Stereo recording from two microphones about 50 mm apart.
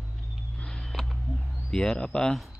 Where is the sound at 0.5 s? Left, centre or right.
Centre.